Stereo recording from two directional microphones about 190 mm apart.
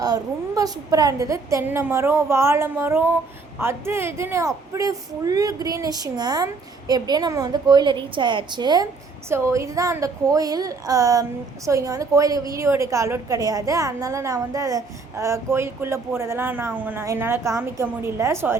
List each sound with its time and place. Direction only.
0.0 s a woman's voice: 20° right (ahead or behind)